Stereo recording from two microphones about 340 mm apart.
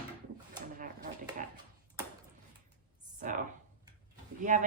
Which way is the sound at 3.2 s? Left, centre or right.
Right.